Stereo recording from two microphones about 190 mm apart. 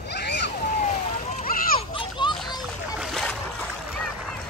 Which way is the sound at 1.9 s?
25° left (ahead or behind).